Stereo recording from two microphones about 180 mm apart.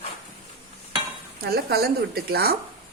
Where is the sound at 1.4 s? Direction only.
60° right (ahead or behind).